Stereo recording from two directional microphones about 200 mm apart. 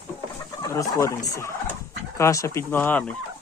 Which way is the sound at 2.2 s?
15° left (ahead or behind).